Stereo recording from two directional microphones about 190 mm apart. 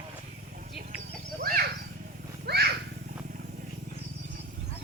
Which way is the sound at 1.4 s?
50° right (ahead or behind).